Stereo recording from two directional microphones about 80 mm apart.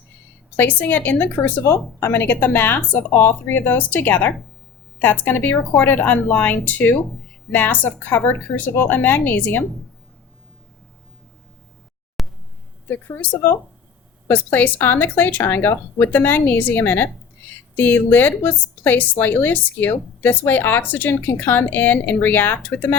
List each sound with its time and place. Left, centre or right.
0.5 s a woman's voice: left
12.2 s a sound: centre
12.9 s a woman's voice: left
14.3 s a woman's voice: left